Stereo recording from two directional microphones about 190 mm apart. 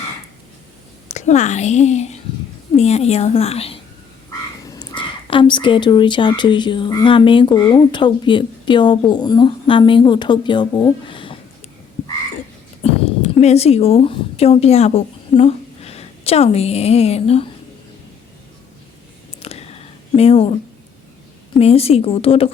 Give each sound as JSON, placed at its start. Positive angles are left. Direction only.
{"t": 1.0, "sound": "a woman's voice", "side_deg": 40}
{"t": 12.8, "sound": "a woman's voice", "side_deg": 35}
{"t": 19.4, "sound": "a sound", "side_deg": 30}
{"t": 21.6, "sound": "a woman's voice", "side_deg": 30}